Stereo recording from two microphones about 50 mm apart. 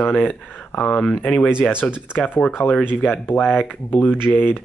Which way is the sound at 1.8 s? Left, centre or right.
Left.